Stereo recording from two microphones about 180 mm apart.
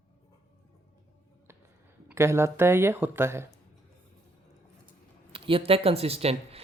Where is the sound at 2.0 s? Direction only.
15° right (ahead or behind).